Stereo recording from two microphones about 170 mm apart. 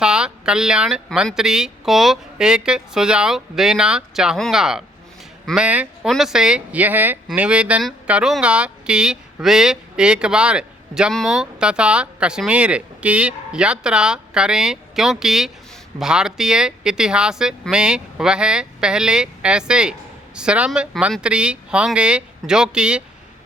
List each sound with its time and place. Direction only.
0.0 s speech: 5° right (ahead or behind)